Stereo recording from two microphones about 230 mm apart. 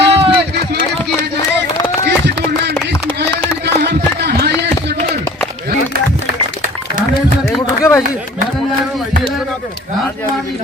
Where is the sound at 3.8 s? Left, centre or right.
Right.